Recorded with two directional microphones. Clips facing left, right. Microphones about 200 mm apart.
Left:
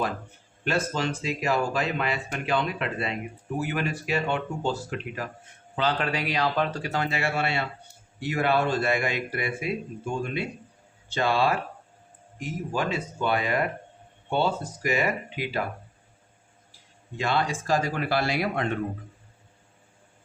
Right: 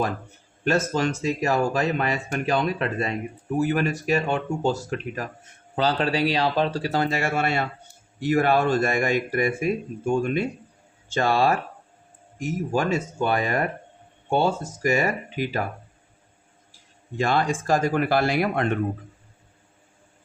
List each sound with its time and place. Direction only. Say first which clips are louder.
0.6 s speech: right 4 dB; 45° right (ahead or behind)
17.2 s speech: right 4 dB; 50° right (ahead or behind)